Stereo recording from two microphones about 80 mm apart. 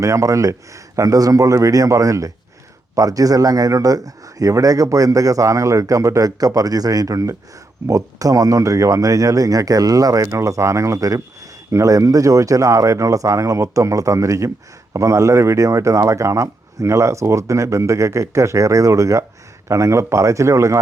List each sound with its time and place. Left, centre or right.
0.0 s a man's voice: right